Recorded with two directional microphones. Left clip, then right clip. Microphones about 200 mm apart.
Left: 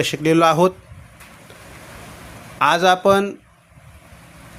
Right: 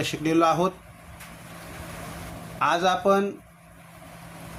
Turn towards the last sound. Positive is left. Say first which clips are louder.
# left 7 dB
turn(degrees=45)  # may be behind; listen again after turning